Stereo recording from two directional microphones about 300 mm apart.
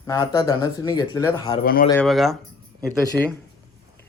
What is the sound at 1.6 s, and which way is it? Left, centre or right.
Speech, left.